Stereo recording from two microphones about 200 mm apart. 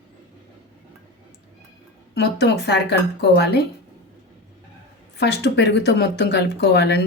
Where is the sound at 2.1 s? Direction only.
55° left (ahead or behind).